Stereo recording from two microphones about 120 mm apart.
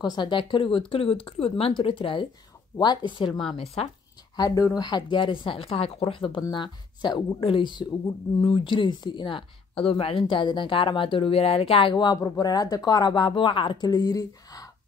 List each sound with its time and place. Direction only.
0.0 s speech: 40° left (ahead or behind)
3.8 s speech: 55° left (ahead or behind)
4.6 s speech: 30° left (ahead or behind); by 11.9 s 55° left (ahead or behind)
11.9 s speech: 35° left (ahead or behind)